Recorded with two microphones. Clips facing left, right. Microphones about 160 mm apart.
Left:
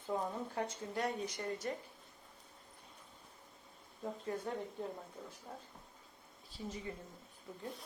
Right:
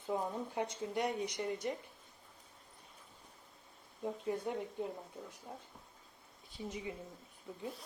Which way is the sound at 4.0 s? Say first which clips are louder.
Right 3 dB; 15° right (ahead or behind).